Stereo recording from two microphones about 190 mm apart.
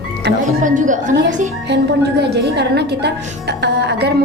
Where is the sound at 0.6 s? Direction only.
40° right (ahead or behind).